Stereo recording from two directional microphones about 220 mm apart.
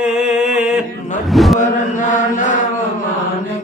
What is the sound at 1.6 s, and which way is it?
Mantra, 35° left (ahead or behind).